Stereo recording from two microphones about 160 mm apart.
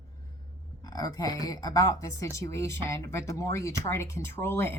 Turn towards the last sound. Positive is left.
turn(degrees=15)  # may be behind; listen again after turning